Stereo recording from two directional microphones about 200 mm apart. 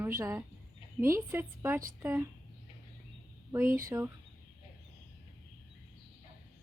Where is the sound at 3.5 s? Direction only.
10° right (ahead or behind).